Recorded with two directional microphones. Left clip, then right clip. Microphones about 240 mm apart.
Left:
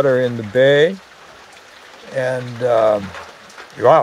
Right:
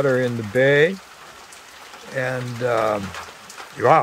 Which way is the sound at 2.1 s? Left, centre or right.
Centre.